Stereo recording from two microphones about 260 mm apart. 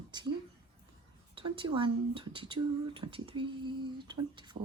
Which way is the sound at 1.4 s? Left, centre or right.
Centre.